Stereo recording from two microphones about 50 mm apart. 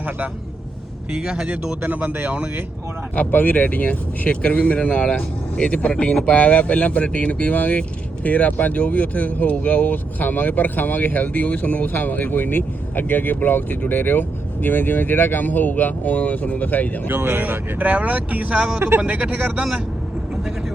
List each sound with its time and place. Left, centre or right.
1.1 s speech: centre
1.5 s speech: right
3.2 s speech: left
17.1 s speech: right